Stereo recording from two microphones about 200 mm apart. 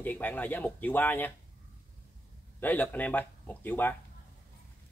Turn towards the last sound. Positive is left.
turn(degrees=10)  # may be behind; listen again after turning